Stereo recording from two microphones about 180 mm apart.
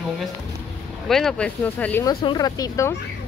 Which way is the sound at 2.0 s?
25° left (ahead or behind).